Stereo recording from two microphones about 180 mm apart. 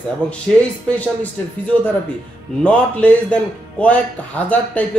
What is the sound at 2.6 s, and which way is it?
A man's voice, 5° left (ahead or behind).